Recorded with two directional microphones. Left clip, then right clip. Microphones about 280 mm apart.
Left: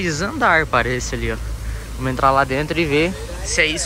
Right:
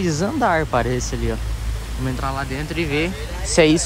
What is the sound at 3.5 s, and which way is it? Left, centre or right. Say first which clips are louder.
Speech: right 3 dB; centre.